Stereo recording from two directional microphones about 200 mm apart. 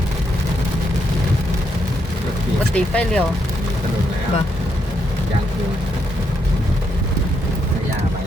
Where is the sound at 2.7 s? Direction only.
5° left (ahead or behind).